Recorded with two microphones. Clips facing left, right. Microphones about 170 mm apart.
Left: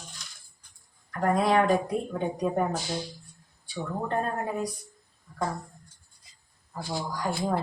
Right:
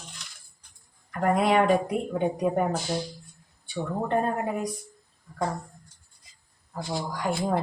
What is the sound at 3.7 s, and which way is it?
Speech, 10° right (ahead or behind).